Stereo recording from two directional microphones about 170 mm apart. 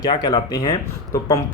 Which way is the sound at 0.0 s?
25° left (ahead or behind).